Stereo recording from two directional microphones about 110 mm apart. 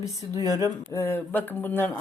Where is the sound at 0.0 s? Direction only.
30° left (ahead or behind).